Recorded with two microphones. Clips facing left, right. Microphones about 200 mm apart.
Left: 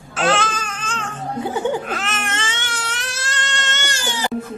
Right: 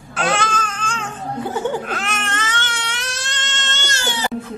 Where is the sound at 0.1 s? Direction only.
Centre (ahead or behind).